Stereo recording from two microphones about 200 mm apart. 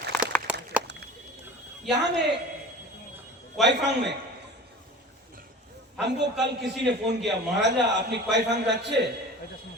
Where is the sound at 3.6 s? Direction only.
60° right (ahead or behind).